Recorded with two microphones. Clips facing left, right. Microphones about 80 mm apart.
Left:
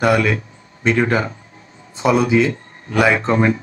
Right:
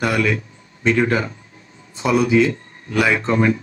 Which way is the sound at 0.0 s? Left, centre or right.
Left.